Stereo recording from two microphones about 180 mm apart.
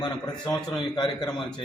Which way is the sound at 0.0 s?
25° left (ahead or behind).